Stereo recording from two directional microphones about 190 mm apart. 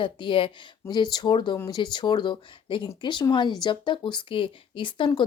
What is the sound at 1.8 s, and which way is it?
Speech, 25° left (ahead or behind).